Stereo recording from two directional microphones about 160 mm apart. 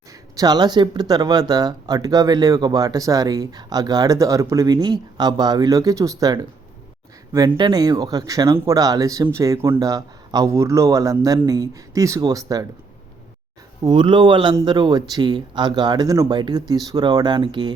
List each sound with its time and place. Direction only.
0.1 s speech: 25° right (ahead or behind)
13.8 s speech: 30° right (ahead or behind)